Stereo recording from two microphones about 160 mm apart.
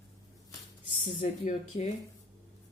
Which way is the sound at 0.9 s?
40° left (ahead or behind).